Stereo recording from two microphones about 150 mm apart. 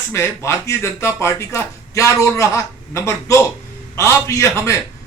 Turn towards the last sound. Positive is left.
turn(degrees=20)  # may be behind; listen again after turning